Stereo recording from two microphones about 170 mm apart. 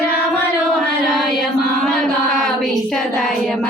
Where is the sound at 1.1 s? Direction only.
Centre (ahead or behind).